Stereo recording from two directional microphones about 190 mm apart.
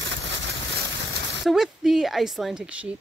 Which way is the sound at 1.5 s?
Centre (ahead or behind).